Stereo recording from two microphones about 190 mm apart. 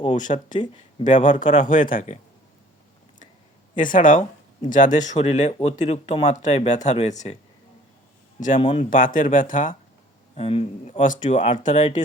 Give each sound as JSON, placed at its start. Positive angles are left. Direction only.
{"t": 0.0, "sound": "speech", "side_deg": 40}
{"t": 3.8, "sound": "speech", "side_deg": 45}
{"t": 8.4, "sound": "speech", "side_deg": 40}
{"t": 8.9, "sound": "speech", "side_deg": 45}
{"t": 10.3, "sound": "speech", "side_deg": 30}